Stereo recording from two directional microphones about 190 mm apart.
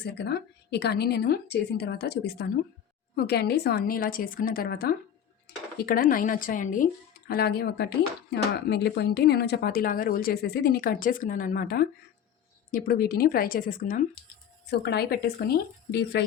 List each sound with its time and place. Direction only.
0.0 s a woman's voice: 60° left (ahead or behind); by 6.8 s 45° left (ahead or behind)
7.3 s a woman's voice: 55° left (ahead or behind)
14.7 s a woman's voice: 60° left (ahead or behind)